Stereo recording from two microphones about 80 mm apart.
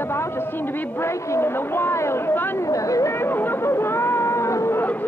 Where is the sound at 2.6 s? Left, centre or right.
Left.